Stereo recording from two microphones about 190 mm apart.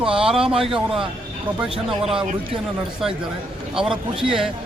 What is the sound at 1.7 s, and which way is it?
Speech, 30° right (ahead or behind).